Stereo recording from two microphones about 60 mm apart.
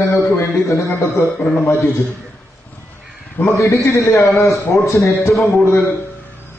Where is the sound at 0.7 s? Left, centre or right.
Left.